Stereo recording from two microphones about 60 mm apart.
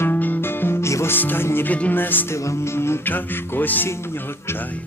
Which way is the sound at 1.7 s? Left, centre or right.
Left.